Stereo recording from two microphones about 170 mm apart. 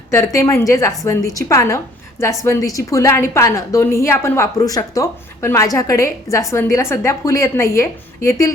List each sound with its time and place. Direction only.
0.3 s a woman's voice: 15° left (ahead or behind)